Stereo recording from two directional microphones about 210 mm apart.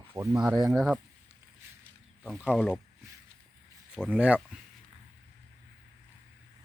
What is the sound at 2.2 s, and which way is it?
Speech, 5° right (ahead or behind).